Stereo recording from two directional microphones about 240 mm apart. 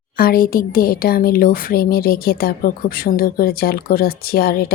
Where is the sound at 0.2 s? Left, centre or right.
Left.